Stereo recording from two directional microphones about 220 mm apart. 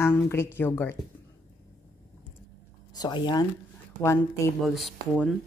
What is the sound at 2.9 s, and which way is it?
Speech, 20° left (ahead or behind).